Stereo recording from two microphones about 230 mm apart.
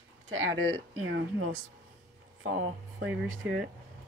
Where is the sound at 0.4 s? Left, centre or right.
Right.